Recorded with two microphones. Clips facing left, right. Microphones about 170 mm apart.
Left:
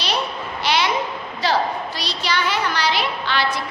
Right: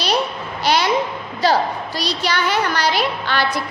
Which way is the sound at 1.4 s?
40° right (ahead or behind).